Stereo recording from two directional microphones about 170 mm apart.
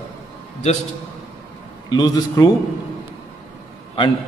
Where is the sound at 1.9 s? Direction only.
25° left (ahead or behind).